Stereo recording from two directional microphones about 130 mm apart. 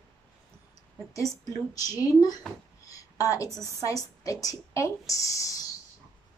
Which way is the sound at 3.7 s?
25° left (ahead or behind).